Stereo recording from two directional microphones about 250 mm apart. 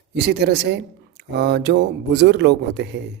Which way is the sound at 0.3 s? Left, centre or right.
Right.